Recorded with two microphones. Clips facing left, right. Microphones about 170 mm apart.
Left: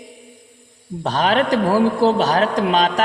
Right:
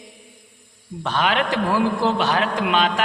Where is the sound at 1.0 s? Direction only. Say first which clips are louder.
Left 4 dB; 40° left (ahead or behind).